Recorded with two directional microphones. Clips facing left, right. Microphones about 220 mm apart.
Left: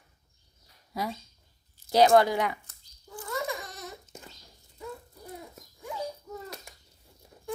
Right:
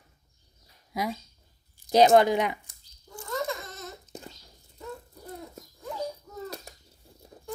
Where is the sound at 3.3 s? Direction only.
15° left (ahead or behind).